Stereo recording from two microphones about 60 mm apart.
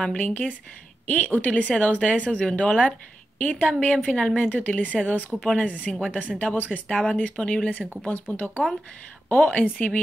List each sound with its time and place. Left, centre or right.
0.1 s a woman's voice: left
5.3 s speech: centre
5.6 s a woman's voice: left